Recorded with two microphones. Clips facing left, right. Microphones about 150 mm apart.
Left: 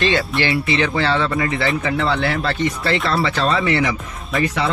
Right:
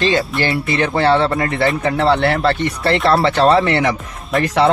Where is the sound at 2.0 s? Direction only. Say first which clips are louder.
Right 5 dB; 65° right (ahead or behind).